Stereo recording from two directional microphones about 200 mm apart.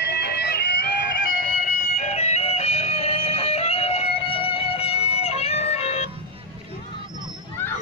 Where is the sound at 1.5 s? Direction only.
35° left (ahead or behind).